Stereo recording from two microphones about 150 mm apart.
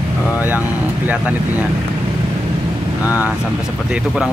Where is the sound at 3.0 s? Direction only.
10° right (ahead or behind).